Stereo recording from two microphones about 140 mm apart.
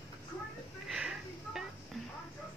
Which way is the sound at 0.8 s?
5° right (ahead or behind).